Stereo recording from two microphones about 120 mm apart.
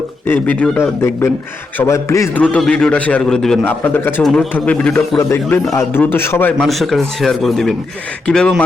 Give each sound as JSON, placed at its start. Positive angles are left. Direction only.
{"t": 0.3, "sound": "a man's voice", "side_deg": 15}
{"t": 0.8, "sound": "a man's voice", "side_deg": 20}
{"t": 2.3, "sound": "a man's voice", "side_deg": 10}
{"t": 3.6, "sound": "a man's voice", "side_deg": 15}
{"t": 5.1, "sound": "a man's voice", "side_deg": 20}
{"t": 6.6, "sound": "a man's voice", "side_deg": 0}